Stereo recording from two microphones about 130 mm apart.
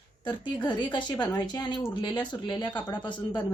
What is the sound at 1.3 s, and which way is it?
A woman's voice, 30° left (ahead or behind).